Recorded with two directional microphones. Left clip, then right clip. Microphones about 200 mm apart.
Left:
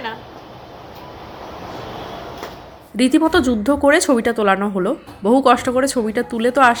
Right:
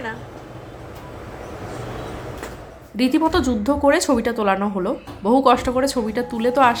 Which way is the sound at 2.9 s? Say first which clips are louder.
Left 3 dB; 15° left (ahead or behind).